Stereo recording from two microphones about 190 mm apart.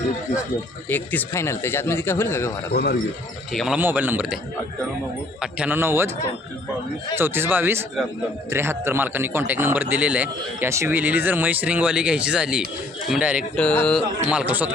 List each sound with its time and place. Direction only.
0.9 s speech: 10° left (ahead or behind)
2.7 s speech: 60° left (ahead or behind)
3.5 s speech: centre (ahead or behind)
3.8 s a man's voice: 10° right (ahead or behind)
5.4 s a man's voice: 5° right (ahead or behind)
7.2 s a man's voice: 10° right (ahead or behind)
13.6 s speech: 5° left (ahead or behind)
14.3 s a man's voice: 5° right (ahead or behind)